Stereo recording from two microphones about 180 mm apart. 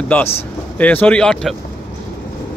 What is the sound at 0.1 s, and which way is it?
Speech, 10° left (ahead or behind).